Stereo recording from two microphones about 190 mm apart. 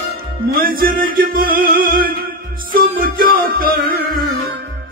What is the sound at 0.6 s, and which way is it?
Music, 50° right (ahead or behind).